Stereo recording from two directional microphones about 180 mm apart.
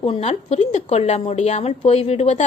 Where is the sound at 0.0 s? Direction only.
35° left (ahead or behind).